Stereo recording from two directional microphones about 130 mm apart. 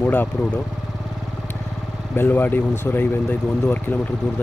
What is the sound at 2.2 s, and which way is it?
Speech, 15° left (ahead or behind).